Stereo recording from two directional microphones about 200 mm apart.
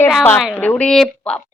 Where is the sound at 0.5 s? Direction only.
10° left (ahead or behind).